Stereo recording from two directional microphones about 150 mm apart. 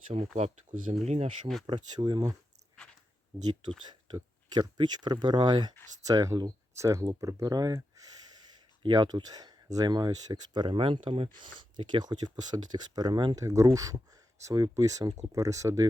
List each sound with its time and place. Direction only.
0.1 s speech: 45° right (ahead or behind)
1.6 s speech: 30° right (ahead or behind)
4.1 s speech: 30° right (ahead or behind)